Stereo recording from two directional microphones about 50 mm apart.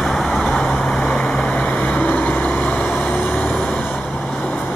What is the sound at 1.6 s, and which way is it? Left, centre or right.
Vehicle, left.